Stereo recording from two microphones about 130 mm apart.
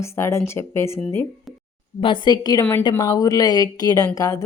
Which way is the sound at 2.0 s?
35° left (ahead or behind).